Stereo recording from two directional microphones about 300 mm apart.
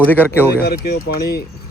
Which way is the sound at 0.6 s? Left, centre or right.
Left.